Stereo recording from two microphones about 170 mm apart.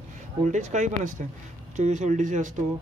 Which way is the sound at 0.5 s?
45° right (ahead or behind).